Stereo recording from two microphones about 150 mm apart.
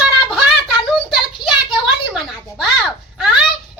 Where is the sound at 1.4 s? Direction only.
30° left (ahead or behind).